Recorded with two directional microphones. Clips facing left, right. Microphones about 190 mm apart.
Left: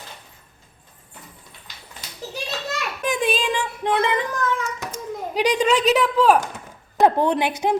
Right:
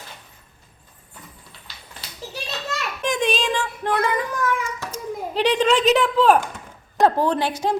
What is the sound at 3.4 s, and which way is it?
Music, 15° left (ahead or behind).